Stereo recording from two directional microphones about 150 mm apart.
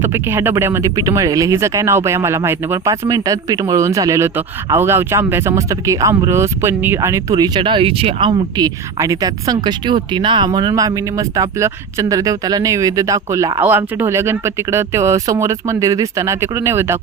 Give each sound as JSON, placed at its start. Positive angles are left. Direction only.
{"t": 0.0, "sound": "speech", "side_deg": -15}